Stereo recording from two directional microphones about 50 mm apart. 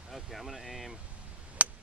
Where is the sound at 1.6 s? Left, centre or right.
Right.